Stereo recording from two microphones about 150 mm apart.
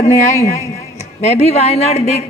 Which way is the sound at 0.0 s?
50° left (ahead or behind).